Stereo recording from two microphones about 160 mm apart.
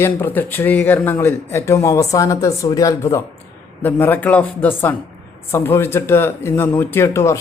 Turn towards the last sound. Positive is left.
turn(degrees=15)  # may be behind; listen again after turning